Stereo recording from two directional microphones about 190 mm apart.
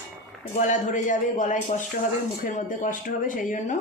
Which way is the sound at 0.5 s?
40° left (ahead or behind).